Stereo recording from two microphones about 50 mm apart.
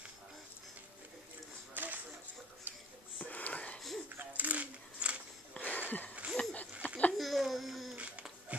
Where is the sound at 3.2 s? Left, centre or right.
Left.